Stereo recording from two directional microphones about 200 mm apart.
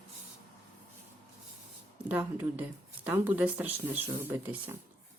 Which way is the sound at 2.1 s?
10° right (ahead or behind).